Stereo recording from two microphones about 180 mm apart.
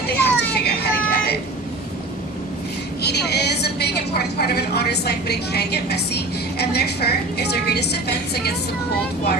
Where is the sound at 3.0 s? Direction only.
65° left (ahead or behind).